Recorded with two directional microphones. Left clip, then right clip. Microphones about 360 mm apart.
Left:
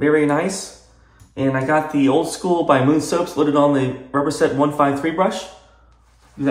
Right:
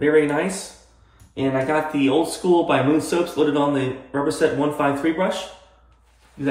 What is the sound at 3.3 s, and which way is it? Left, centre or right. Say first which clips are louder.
A man's voice: left 5 dB; centre.